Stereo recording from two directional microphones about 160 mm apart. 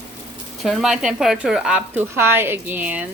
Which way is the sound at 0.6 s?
Centre (ahead or behind).